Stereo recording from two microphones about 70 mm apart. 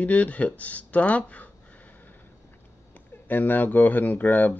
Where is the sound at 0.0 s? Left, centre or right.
Left.